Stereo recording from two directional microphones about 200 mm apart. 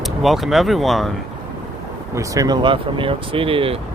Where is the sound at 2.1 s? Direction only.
15° right (ahead or behind).